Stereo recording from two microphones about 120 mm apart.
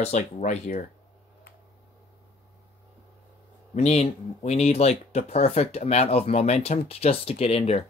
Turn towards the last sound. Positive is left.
turn(degrees=55)  # may be behind; listen again after turning